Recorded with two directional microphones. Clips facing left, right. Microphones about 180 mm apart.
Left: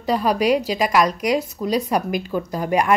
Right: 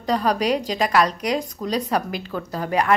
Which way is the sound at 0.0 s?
10° left (ahead or behind).